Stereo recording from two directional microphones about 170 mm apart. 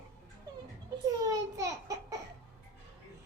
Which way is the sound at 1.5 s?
20° right (ahead or behind).